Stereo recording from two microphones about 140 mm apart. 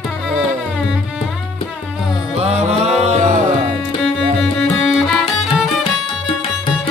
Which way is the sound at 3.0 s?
60° right (ahead or behind).